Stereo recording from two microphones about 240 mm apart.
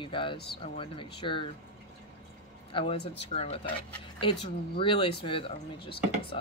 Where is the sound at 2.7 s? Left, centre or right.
Left.